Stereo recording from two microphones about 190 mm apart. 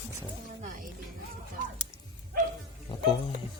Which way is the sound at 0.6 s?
45° right (ahead or behind).